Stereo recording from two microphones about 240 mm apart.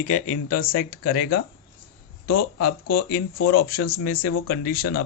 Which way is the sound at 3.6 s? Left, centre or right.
Left.